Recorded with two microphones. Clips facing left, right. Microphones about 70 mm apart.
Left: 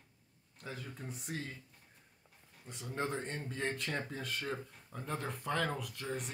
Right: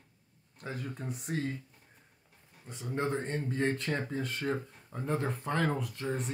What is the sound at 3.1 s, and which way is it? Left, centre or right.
Speech, right.